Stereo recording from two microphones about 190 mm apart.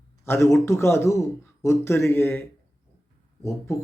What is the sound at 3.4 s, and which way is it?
Speech, 15° left (ahead or behind).